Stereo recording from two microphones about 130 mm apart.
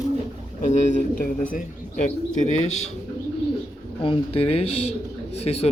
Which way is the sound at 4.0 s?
45° left (ahead or behind).